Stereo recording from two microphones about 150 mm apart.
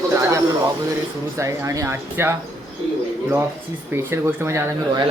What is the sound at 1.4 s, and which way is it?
Speech, 20° right (ahead or behind).